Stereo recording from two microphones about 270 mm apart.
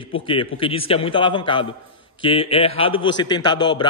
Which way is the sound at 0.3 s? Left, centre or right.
Centre.